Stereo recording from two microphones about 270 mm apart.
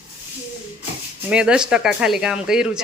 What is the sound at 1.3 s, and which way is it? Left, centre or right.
A woman's voice, centre.